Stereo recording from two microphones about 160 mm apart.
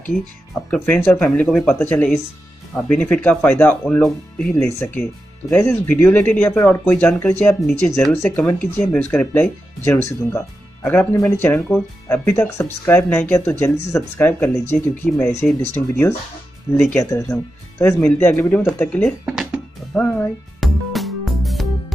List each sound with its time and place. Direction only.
0.8 s speech: 10° left (ahead or behind)
19.2 s music: 5° right (ahead or behind)